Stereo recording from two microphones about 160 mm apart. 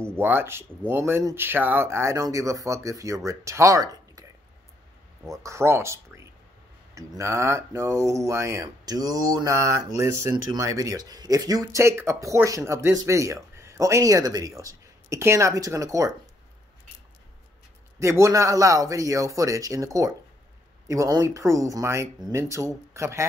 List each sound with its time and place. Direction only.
0.0 s speech: 15° right (ahead or behind)
5.4 s speech: 15° right (ahead or behind)
17.9 s speech: 20° right (ahead or behind)